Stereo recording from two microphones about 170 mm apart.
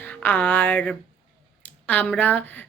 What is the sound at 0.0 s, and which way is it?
Speech, 10° left (ahead or behind).